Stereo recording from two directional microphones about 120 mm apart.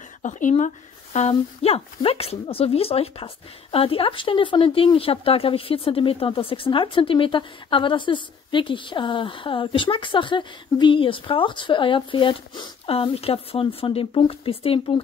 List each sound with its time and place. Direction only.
0.2 s speech: 90° left
1.1 s speech: 55° left (ahead or behind)